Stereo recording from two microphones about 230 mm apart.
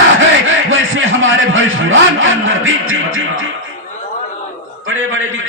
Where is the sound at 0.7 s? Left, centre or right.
Right.